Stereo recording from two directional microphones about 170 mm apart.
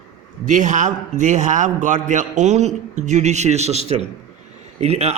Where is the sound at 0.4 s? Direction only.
45° right (ahead or behind).